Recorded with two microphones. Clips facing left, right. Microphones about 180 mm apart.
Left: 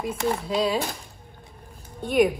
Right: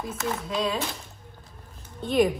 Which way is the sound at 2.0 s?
10° left (ahead or behind).